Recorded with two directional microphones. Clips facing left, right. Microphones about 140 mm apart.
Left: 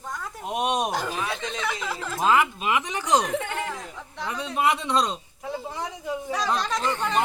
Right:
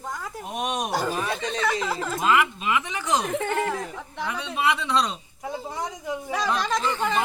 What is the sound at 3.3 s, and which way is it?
Speech, 45° right (ahead or behind).